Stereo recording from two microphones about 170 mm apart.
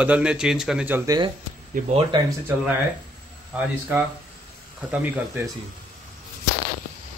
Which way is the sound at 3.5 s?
10° right (ahead or behind).